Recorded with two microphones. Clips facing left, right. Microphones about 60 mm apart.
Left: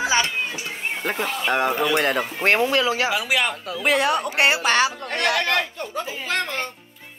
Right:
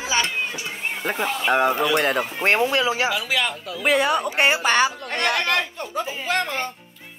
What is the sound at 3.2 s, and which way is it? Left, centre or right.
Speech, centre.